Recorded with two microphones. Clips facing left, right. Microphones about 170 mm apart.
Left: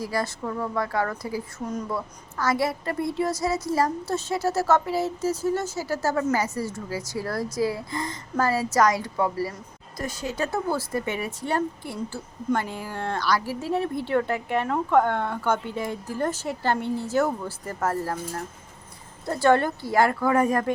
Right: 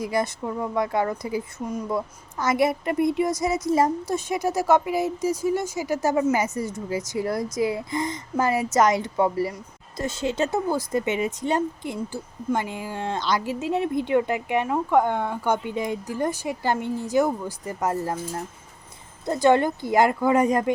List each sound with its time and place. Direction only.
0.0 s a woman's voice: 20° right (ahead or behind)